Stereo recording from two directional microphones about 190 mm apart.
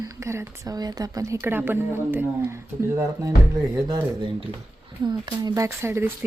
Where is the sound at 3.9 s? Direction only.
20° right (ahead or behind).